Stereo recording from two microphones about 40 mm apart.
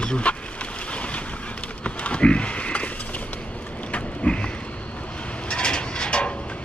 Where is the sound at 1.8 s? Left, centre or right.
Left.